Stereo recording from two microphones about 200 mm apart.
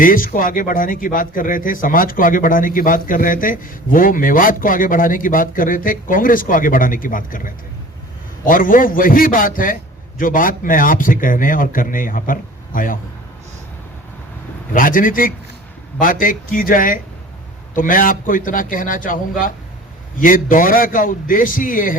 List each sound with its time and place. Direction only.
0.0 s speech: 45° left (ahead or behind)
14.7 s speech: 45° left (ahead or behind)